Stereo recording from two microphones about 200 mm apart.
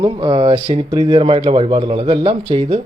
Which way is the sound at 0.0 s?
20° right (ahead or behind).